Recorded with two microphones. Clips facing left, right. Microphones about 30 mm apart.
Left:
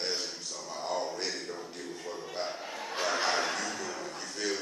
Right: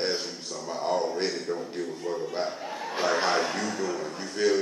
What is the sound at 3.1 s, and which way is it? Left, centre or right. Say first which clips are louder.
Chuckle: right 5 dB; centre.